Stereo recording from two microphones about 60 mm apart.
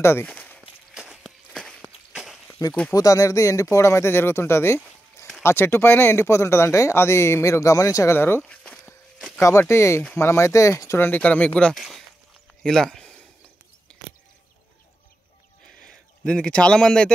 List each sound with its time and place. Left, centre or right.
0.2 s speech: left
1.2 s walk: centre
2.2 s a sound: centre
2.9 s speech: left
3.7 s speech: left
8.4 s a sound: centre
9.6 s speech: left
11.0 s speech: left
11.7 s speech: centre
15.8 s a man's voice: centre